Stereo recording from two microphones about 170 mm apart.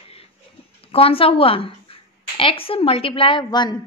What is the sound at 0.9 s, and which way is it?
A woman's voice, 35° left (ahead or behind).